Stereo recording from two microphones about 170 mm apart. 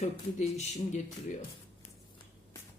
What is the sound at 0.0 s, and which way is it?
Speech, 40° left (ahead or behind).